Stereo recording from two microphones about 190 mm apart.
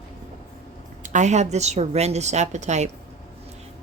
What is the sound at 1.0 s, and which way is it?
Speech, 40° right (ahead or behind).